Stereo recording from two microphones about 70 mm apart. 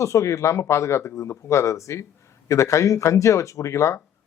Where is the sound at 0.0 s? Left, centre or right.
Left.